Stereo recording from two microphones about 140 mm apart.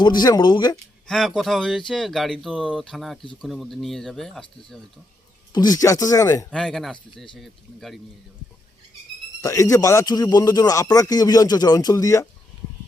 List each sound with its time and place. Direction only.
0.0 s speech: 30° left (ahead or behind)
1.0 s speech: centre (ahead or behind)
5.5 s speech: 30° left (ahead or behind)
6.5 s speech: 5° left (ahead or behind)
9.4 s speech: 20° left (ahead or behind)